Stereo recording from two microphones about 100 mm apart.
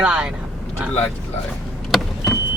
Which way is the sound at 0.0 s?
10° right (ahead or behind).